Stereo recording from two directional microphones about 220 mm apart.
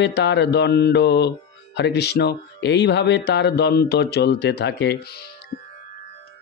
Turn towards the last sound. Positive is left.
turn(degrees=50)  # may be behind; listen again after turning